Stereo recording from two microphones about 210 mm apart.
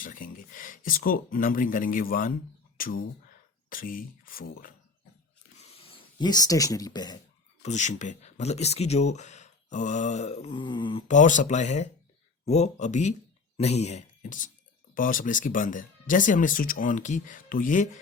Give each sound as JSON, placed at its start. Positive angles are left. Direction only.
{"t": 0.0, "sound": "speech", "side_deg": 40}
{"t": 2.7, "sound": "a sound", "side_deg": 40}
{"t": 3.7, "sound": "speech", "side_deg": 40}
{"t": 5.5, "sound": "a sound", "side_deg": 25}
{"t": 7.6, "sound": "speech", "side_deg": 35}
{"t": 11.1, "sound": "speech", "side_deg": 35}